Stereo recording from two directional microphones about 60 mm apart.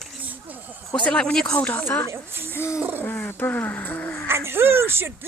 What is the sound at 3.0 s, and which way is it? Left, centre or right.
Speech, left.